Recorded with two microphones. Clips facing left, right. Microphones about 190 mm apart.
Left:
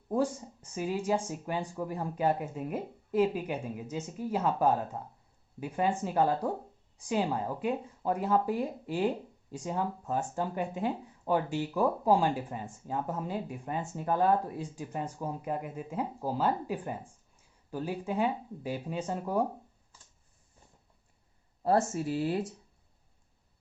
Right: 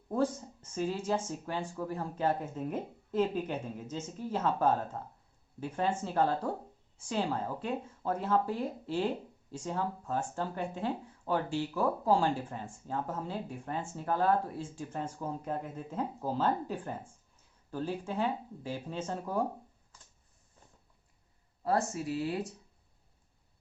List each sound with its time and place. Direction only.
0.1 s speech: 15° left (ahead or behind)
21.6 s speech: 30° left (ahead or behind)